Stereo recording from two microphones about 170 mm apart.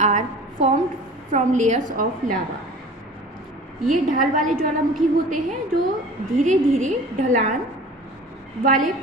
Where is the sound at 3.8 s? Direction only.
50° right (ahead or behind).